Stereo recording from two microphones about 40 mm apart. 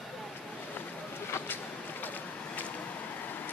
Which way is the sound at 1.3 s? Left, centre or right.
Left.